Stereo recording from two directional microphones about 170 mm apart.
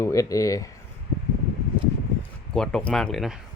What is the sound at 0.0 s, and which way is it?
Speech, 20° left (ahead or behind).